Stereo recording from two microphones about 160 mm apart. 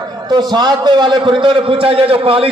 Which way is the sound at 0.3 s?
25° right (ahead or behind).